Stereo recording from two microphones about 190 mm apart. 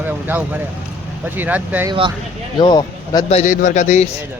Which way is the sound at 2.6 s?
20° left (ahead or behind).